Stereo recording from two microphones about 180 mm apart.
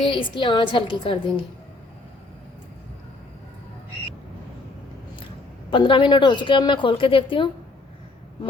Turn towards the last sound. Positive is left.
turn(degrees=30)  # may be behind; listen again after turning